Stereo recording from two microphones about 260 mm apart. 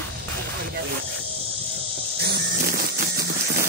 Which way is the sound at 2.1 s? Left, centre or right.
Right.